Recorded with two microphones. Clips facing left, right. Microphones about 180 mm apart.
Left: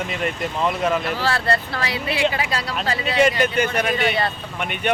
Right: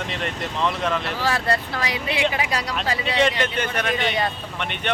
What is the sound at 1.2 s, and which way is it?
Speech, 15° right (ahead or behind).